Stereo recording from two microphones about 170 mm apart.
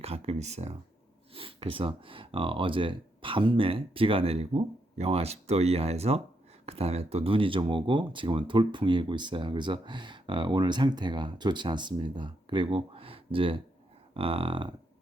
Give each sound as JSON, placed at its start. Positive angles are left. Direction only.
{"t": 0.0, "sound": "speech", "side_deg": -40}